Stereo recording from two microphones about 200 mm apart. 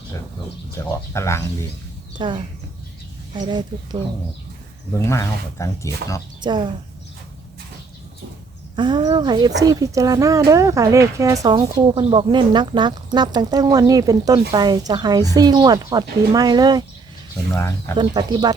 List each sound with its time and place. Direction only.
1.1 s speech: 15° left (ahead or behind)
2.1 s speech: 25° right (ahead or behind)
4.9 s speech: 15° left (ahead or behind)
6.4 s speech: 20° right (ahead or behind)
8.7 s speech: 20° right (ahead or behind)
17.5 s speech: 15° left (ahead or behind)
17.9 s speech: 20° right (ahead or behind)